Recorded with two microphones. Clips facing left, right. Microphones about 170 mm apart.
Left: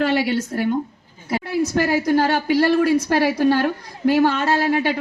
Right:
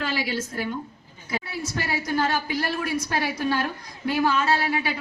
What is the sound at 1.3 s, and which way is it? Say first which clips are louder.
Speech: left 10 dB; 55° left (ahead or behind).